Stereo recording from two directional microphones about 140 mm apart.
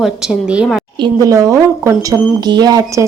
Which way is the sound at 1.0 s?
25° right (ahead or behind).